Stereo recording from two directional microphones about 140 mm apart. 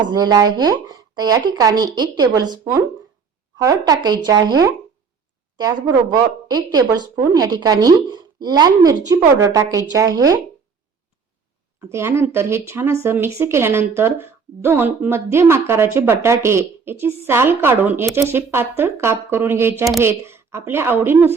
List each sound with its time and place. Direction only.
0.0 s a woman's voice: 30° right (ahead or behind)
11.9 s speech: 20° right (ahead or behind)